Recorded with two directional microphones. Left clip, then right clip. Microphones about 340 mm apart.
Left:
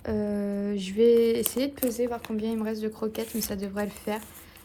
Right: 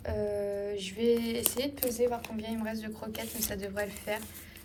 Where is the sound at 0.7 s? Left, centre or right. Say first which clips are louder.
Left 10 dB; centre.